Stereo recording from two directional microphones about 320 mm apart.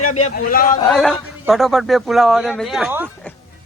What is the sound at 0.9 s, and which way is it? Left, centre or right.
A man's voice, centre.